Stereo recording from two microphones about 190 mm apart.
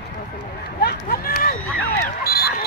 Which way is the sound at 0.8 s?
55° left (ahead or behind).